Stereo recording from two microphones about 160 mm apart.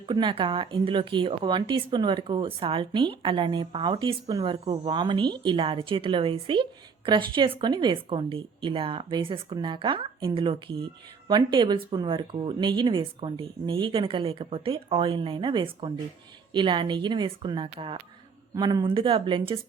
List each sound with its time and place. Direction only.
0.0 s a woman's voice: 30° right (ahead or behind)
4.6 s a woman's voice: 40° right (ahead or behind)
4.9 s a woman's voice: 30° right (ahead or behind)